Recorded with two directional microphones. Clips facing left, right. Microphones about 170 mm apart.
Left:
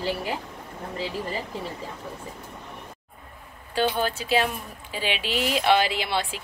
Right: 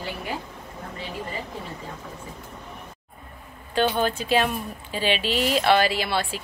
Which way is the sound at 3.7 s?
10° left (ahead or behind).